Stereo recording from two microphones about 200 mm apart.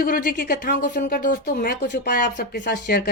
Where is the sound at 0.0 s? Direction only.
45° left (ahead or behind).